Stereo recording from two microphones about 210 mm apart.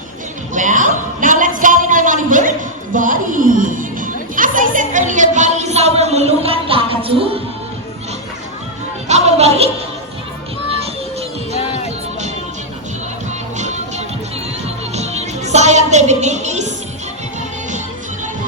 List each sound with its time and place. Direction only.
0.5 s music: 40° right (ahead or behind)
1.2 s a sound: 40° right (ahead or behind)
9.0 s music: 30° right (ahead or behind)
11.5 s music: 30° left (ahead or behind)
13.6 s music: 35° right (ahead or behind)